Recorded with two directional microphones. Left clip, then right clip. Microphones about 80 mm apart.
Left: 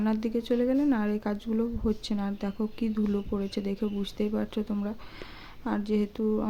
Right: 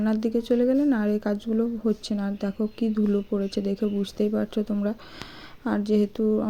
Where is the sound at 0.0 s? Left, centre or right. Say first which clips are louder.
Right 4 dB; right.